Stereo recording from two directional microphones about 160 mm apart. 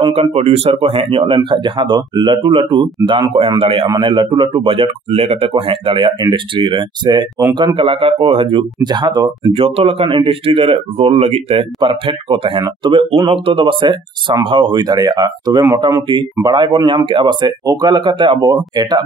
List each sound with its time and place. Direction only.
0.1 s speech: 40° right (ahead or behind)
9.5 s speech: 35° right (ahead or behind)